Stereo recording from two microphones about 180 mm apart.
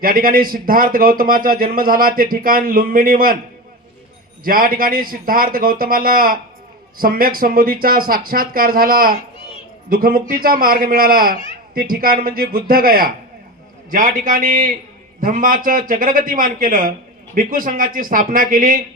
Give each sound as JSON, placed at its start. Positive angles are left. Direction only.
{"t": 0.0, "sound": "a man's voice", "side_deg": -55}
{"t": 4.4, "sound": "a man's voice", "side_deg": -55}